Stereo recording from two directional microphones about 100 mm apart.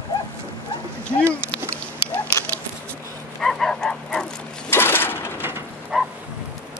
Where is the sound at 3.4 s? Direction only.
5° left (ahead or behind).